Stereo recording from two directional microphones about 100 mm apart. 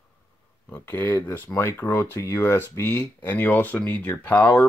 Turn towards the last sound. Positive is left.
turn(degrees=15)  # may be behind; listen again after turning